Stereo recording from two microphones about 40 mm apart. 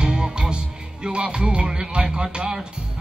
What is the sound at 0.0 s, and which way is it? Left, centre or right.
Music, right.